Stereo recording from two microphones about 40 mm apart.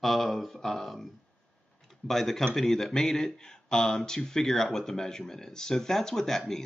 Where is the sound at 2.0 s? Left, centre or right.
Centre.